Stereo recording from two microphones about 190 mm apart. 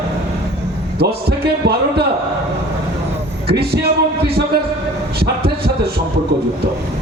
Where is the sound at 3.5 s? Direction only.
55° right (ahead or behind).